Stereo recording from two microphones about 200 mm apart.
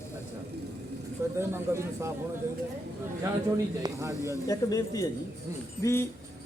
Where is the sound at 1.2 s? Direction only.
15° right (ahead or behind).